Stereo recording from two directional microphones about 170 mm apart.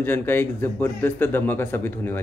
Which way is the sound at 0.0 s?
10° left (ahead or behind).